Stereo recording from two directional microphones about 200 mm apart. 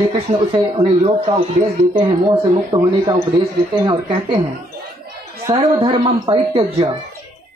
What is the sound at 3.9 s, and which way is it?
Speech, 20° right (ahead or behind).